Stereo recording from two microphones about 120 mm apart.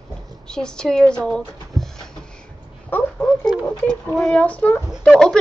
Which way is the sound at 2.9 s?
15° left (ahead or behind).